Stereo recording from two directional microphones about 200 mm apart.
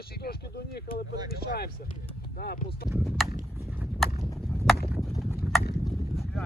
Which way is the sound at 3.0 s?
Centre (ahead or behind).